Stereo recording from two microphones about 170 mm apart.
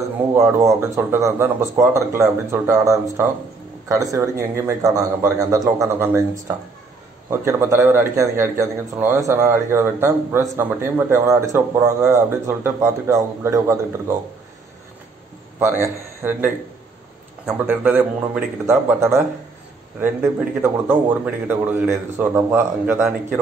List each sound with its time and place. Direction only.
0.3 s a man's voice: 15° right (ahead or behind)
7.2 s speech: 15° right (ahead or behind)
15.6 s speech: 15° right (ahead or behind)
17.6 s speech: 10° right (ahead or behind)